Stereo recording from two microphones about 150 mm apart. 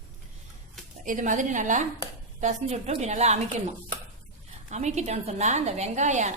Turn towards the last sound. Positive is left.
turn(degrees=-50)  # may be behind; listen again after turning